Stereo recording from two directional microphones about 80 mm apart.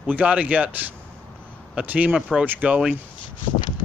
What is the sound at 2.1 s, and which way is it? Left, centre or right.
Speech, centre.